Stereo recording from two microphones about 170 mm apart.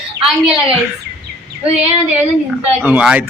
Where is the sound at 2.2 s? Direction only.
10° right (ahead or behind).